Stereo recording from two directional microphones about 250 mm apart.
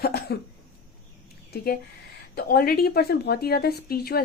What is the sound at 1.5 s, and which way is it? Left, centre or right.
A woman's voice, left.